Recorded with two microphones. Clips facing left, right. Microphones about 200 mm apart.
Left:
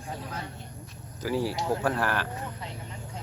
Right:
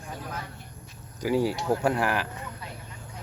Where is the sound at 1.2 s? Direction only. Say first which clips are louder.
Right 3 dB; 15° right (ahead or behind).